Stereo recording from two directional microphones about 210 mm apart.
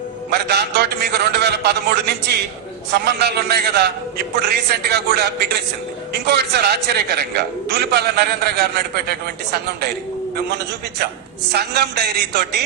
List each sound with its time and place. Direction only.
0.3 s a man's voice: 50° right (ahead or behind)